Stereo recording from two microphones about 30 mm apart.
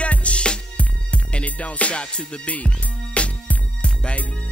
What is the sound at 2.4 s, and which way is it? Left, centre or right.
Music, left.